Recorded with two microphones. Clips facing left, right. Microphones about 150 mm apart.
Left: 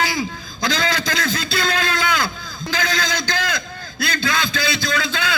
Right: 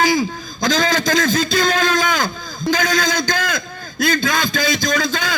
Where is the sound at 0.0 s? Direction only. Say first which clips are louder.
Right 6 dB; 45° right (ahead or behind).